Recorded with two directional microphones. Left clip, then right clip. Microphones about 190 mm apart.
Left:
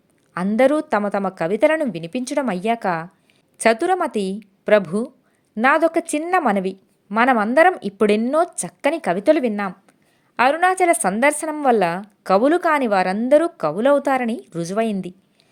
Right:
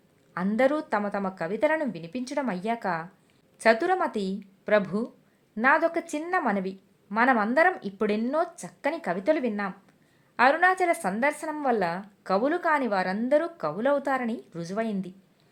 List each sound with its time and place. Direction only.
0.3 s a woman's voice: 25° left (ahead or behind)